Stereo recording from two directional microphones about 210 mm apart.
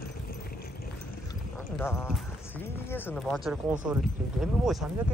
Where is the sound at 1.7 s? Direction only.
Centre (ahead or behind).